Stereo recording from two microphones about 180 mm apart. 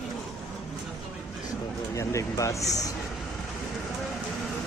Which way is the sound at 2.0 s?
15° left (ahead or behind).